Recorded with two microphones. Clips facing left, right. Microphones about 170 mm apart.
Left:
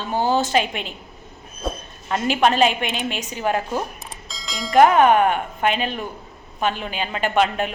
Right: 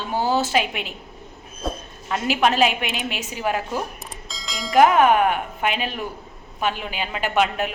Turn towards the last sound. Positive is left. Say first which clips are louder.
# left 2 dB
turn(degrees=-5)  # may be behind; listen again after turning